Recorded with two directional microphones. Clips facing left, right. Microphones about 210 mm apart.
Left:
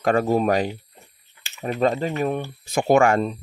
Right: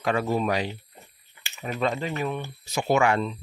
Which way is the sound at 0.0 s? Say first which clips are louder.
Left 5 dB; 45° left (ahead or behind).